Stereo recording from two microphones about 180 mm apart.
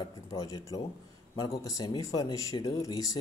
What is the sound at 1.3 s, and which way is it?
Speech, 20° left (ahead or behind).